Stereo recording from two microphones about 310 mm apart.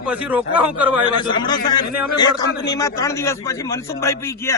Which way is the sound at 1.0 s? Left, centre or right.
Centre.